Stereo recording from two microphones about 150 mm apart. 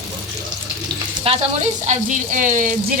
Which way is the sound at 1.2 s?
45° right (ahead or behind).